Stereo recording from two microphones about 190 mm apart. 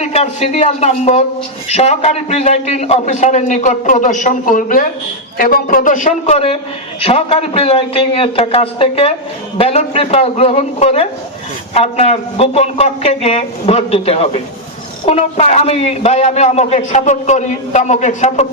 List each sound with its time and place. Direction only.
0.0 s a man's voice: 35° left (ahead or behind)